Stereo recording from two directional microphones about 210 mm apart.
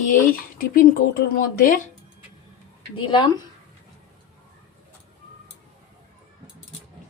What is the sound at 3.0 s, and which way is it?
Speech, 20° left (ahead or behind).